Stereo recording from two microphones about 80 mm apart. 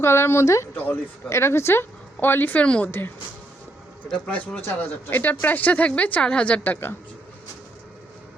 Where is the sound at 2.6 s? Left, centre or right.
Centre.